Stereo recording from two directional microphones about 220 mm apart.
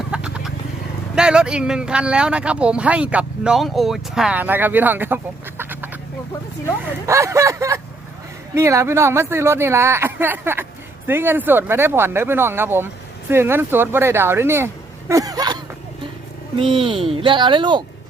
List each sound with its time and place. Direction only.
0.1 s vehicle: 5° right (ahead or behind)
1.1 s speech: 5° right (ahead or behind)
7.1 s speech: 15° right (ahead or behind)
15.1 s a sound: 15° right (ahead or behind)
16.6 s speech: 25° right (ahead or behind)